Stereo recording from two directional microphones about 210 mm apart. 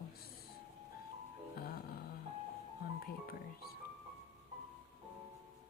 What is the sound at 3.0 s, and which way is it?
Speech, 45° left (ahead or behind).